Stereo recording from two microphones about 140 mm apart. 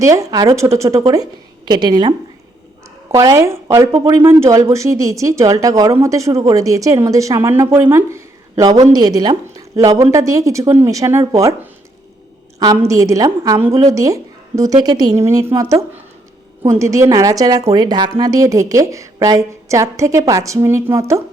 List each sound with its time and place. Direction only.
0.0 s speech: 25° right (ahead or behind)
3.1 s a woman's voice: 20° right (ahead or behind)
12.9 s speech: 25° right (ahead or behind)
16.6 s speech: 20° right (ahead or behind)